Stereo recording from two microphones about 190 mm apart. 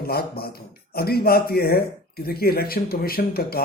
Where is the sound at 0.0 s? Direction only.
55° left (ahead or behind).